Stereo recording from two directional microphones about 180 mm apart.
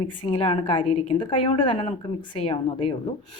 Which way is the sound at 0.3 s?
30° left (ahead or behind).